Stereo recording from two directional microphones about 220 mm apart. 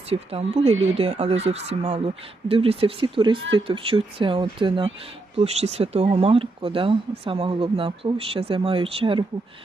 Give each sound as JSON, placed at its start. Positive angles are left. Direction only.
{"t": 0.1, "sound": "speech", "side_deg": -25}